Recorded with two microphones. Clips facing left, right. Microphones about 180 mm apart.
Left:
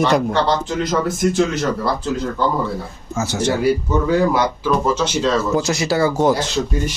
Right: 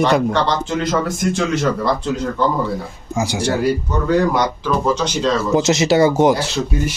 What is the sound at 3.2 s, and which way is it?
Speech, 10° right (ahead or behind).